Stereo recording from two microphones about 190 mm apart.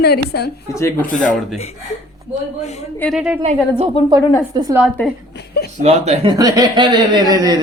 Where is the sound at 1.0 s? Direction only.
45° left (ahead or behind).